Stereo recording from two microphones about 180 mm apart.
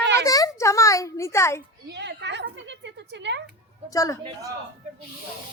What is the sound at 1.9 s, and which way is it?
A woman's voice, 75° right (ahead or behind).